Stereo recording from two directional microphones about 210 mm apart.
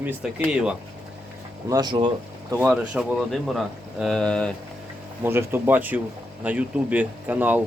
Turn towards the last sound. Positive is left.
turn(degrees=-5)  # may be behind; listen again after turning